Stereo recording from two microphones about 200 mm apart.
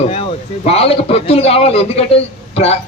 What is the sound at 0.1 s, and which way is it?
A man's voice, 30° left (ahead or behind).